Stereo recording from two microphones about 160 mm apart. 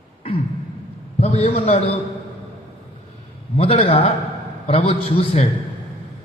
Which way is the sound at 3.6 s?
35° left (ahead or behind).